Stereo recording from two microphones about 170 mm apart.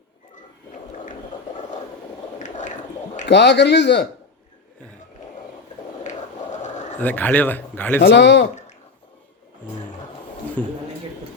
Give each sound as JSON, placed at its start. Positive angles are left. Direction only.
{"t": 2.4, "sound": "a sound", "side_deg": 45}
{"t": 3.2, "sound": "speech", "side_deg": 90}
{"t": 6.0, "sound": "a sound", "side_deg": 45}
{"t": 7.0, "sound": "speech", "side_deg": 10}
{"t": 8.0, "sound": "speech", "side_deg": 90}
{"t": 10.6, "sound": "speech", "side_deg": 10}